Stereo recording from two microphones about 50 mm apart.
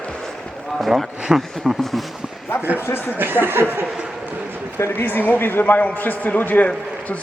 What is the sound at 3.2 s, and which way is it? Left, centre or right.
Speech, right.